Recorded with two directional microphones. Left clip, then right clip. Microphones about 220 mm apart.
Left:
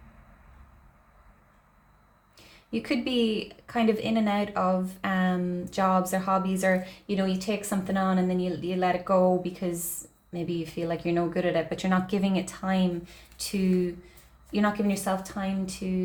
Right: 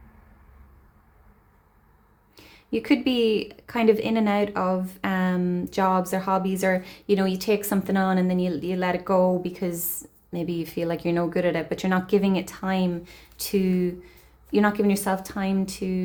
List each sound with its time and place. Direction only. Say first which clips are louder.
2.3 s speech: right 6 dB; 30° right (ahead or behind)